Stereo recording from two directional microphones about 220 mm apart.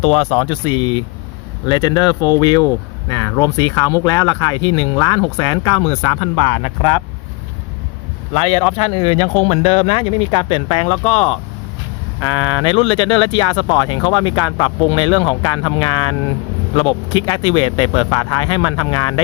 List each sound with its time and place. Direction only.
0.0 s speech: 25° left (ahead or behind)
8.3 s speech: 25° left (ahead or behind)